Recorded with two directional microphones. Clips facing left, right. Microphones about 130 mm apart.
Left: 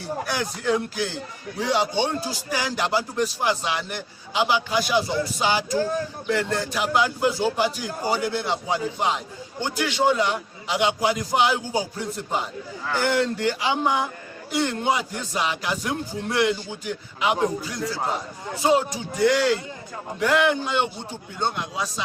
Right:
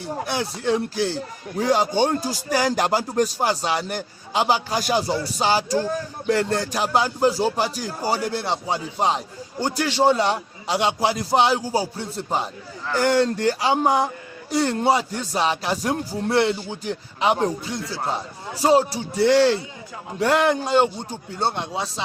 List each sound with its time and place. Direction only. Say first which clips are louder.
0.3 s speech: right 2 dB; 25° right (ahead or behind)